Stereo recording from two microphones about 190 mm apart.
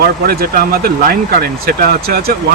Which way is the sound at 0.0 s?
50° right (ahead or behind).